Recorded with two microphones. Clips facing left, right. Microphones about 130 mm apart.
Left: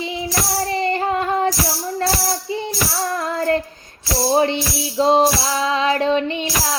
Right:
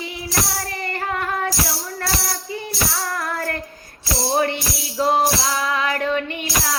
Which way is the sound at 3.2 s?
25° left (ahead or behind).